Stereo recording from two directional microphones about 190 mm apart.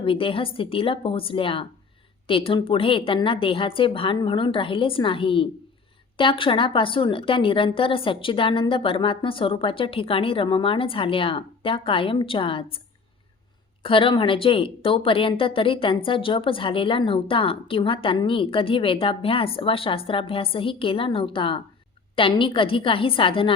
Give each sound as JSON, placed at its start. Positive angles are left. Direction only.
{"t": 0.0, "sound": "a woman's voice", "side_deg": 30}
{"t": 13.8, "sound": "a woman's voice", "side_deg": 25}